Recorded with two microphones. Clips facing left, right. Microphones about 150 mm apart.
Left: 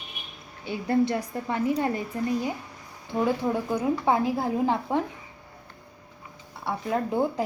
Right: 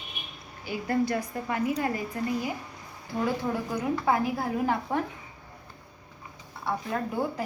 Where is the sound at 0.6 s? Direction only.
25° left (ahead or behind).